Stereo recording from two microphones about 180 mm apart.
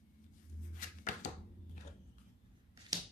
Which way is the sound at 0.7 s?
45° left (ahead or behind).